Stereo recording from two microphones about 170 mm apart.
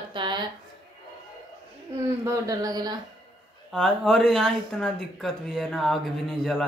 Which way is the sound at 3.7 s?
Centre (ahead or behind).